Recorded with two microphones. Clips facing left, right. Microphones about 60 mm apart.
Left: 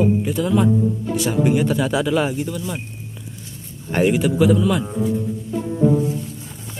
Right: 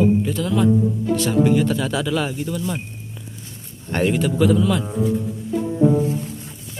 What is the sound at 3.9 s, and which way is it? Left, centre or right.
Speech, centre.